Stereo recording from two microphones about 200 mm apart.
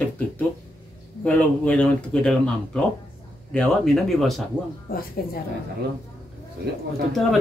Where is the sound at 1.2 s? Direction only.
5° left (ahead or behind).